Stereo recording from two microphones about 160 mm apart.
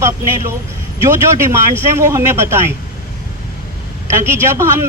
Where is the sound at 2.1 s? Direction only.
15° right (ahead or behind).